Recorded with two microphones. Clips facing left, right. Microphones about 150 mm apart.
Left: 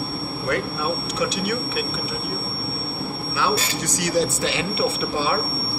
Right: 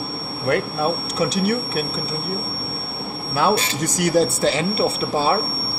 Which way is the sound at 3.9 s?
50° right (ahead or behind).